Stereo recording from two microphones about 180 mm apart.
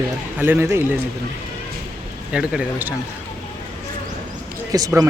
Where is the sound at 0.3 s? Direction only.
10° right (ahead or behind).